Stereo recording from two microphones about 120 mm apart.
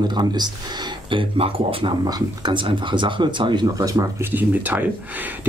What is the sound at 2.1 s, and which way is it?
Speech, 40° right (ahead or behind).